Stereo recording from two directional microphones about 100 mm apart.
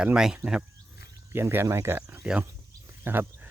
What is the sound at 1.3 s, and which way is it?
Speech, 25° right (ahead or behind).